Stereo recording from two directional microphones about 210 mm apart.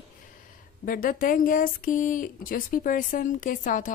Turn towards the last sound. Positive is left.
turn(degrees=40)  # may be behind; listen again after turning